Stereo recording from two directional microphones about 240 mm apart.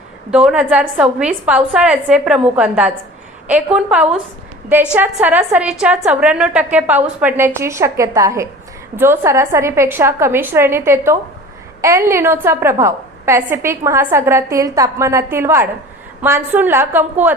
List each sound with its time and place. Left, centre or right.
0.3 s a woman's voice: centre